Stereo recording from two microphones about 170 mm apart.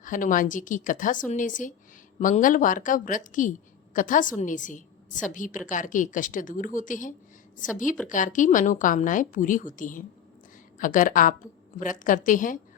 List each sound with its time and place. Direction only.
0.0 s a woman's voice: 50° left (ahead or behind)